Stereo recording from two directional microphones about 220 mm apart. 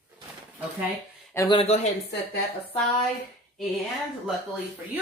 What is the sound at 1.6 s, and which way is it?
Speech, 30° left (ahead or behind).